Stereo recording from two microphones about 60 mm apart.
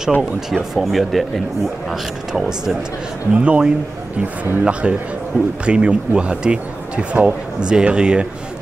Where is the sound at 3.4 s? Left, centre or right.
Centre.